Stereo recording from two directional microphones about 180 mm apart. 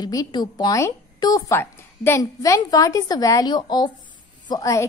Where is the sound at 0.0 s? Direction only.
20° left (ahead or behind).